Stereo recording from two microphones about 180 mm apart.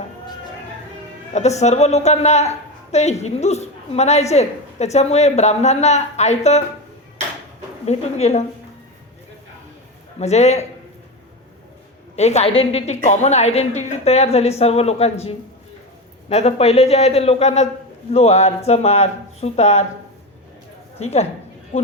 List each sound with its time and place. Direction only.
1.3 s a woman's voice: 40° left (ahead or behind)
7.9 s a woman's voice: 35° left (ahead or behind)
10.2 s a woman's voice: 35° left (ahead or behind)
12.1 s a woman's voice: 40° left (ahead or behind)
16.3 s a woman's voice: 35° left (ahead or behind)
21.0 s a woman's voice: 35° left (ahead or behind)